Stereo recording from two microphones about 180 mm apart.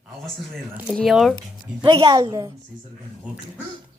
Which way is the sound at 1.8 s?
30° right (ahead or behind).